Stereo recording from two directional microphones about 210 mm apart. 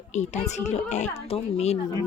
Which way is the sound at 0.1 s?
35° left (ahead or behind).